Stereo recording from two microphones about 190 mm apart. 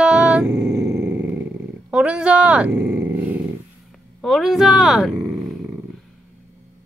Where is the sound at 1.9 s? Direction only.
5° right (ahead or behind).